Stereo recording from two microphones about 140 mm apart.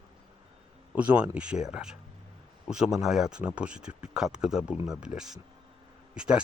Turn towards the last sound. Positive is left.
turn(degrees=-5)  # may be behind; listen again after turning